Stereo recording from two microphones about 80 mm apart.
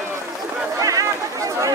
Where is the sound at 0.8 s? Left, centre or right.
Right.